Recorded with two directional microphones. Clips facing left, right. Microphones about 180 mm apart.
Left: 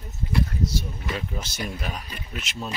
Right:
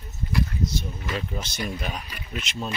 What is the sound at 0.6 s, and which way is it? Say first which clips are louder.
Speech: even; 5° left (ahead or behind).